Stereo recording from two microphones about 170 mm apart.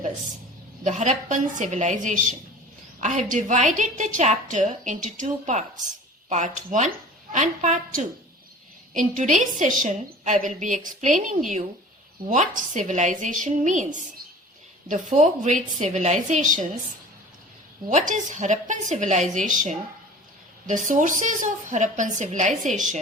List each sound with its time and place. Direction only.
0.9 s a woman's voice: 45° right (ahead or behind)
17.8 s a woman's voice: 50° right (ahead or behind)